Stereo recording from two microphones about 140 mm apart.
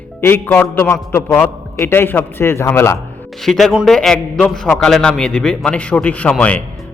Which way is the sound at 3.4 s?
Centre (ahead or behind).